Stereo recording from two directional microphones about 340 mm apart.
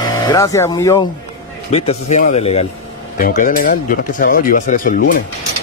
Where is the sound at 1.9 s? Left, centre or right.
Centre.